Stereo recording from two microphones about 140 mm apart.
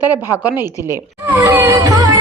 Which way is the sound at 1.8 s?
25° right (ahead or behind).